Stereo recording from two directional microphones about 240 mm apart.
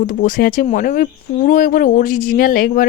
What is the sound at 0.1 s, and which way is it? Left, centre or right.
Speech, left.